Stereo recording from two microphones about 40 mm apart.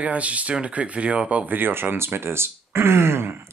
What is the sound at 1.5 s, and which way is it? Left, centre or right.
Speech, right.